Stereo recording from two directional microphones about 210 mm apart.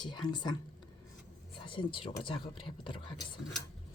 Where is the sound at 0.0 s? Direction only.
20° left (ahead or behind).